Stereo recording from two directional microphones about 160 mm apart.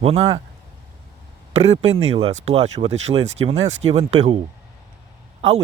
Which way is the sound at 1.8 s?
40° right (ahead or behind).